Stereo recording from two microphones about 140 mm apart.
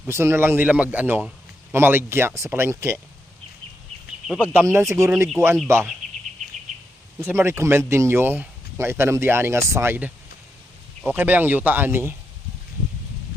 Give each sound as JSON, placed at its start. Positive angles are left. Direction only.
{"t": 0.1, "sound": "speech", "side_deg": -20}
{"t": 4.6, "sound": "speech", "side_deg": -20}
{"t": 7.2, "sound": "speech", "side_deg": -15}